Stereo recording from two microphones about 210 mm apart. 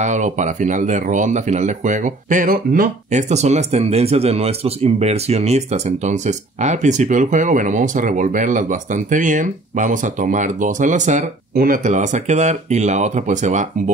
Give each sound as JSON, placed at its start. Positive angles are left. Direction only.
{"t": 0.0, "sound": "speech", "side_deg": -35}